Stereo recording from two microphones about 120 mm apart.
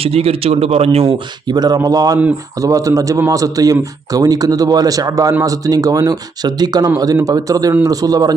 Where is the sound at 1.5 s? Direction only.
35° right (ahead or behind).